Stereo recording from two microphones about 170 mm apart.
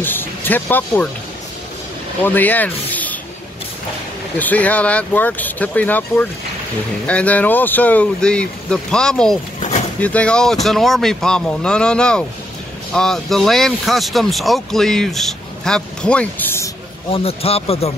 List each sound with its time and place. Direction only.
0.0 s speech: 10° left (ahead or behind)
2.2 s speech: 10° left (ahead or behind)
4.4 s speech: 10° left (ahead or behind)
9.6 s pigeon: 40° left (ahead or behind)
10.0 s speech: 5° left (ahead or behind)
17.1 s speech: 35° left (ahead or behind)